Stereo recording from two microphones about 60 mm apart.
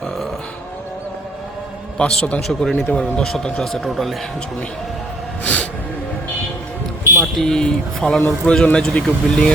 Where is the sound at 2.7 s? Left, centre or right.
Left.